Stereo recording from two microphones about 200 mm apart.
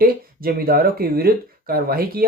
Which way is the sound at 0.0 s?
50° right (ahead or behind).